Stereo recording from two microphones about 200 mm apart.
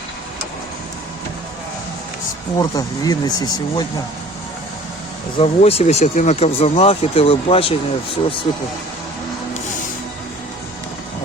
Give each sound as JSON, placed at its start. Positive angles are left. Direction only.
{"t": 2.6, "sound": "speech", "side_deg": 20}
{"t": 5.4, "sound": "speech", "side_deg": 30}